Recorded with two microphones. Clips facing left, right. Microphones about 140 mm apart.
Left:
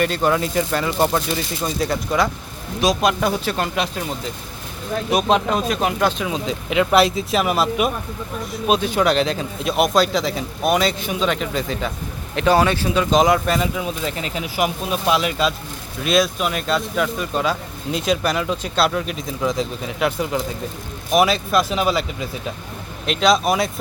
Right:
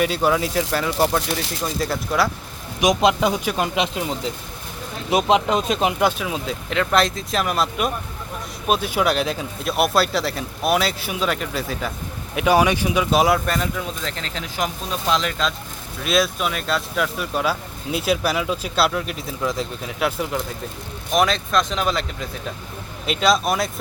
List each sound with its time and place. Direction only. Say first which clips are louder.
0.0 s speech: left 1 dB; 5° right (ahead or behind)
2.8 s speech: right 1 dB; 20° right (ahead or behind)
5.1 s speech: right 1 dB; 20° right (ahead or behind)
6.2 s speech: left 2 dB; centre (ahead or behind)